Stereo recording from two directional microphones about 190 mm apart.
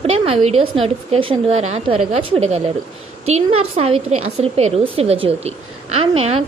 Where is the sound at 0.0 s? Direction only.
30° right (ahead or behind).